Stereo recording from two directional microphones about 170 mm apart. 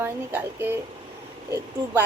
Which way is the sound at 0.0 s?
10° right (ahead or behind).